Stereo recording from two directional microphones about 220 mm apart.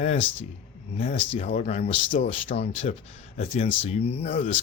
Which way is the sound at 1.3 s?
30° left (ahead or behind).